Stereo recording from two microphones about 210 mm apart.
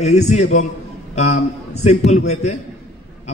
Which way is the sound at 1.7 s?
35° left (ahead or behind).